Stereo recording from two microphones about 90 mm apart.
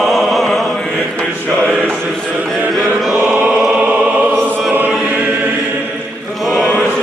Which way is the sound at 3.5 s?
10° right (ahead or behind).